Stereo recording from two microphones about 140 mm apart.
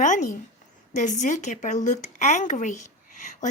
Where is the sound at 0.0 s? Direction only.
65° left (ahead or behind).